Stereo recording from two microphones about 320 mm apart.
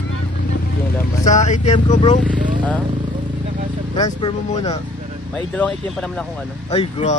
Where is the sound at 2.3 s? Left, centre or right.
Right.